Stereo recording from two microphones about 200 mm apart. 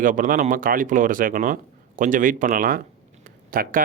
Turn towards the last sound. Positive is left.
turn(degrees=-45)  # may be behind; listen again after turning